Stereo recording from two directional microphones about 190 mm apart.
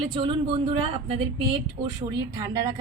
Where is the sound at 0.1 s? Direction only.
25° right (ahead or behind).